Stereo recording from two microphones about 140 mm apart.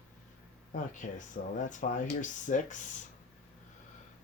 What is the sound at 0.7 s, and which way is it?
Speech, 65° left (ahead or behind).